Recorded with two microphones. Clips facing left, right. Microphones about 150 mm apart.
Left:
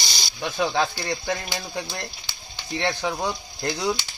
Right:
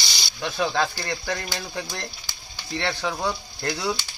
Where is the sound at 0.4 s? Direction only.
15° left (ahead or behind).